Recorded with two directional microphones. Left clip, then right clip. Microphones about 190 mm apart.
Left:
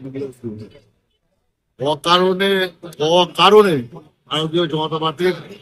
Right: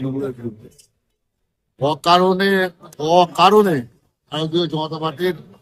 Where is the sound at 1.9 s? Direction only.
25° right (ahead or behind).